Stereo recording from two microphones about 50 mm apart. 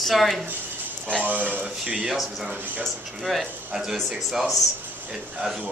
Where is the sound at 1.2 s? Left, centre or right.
Right.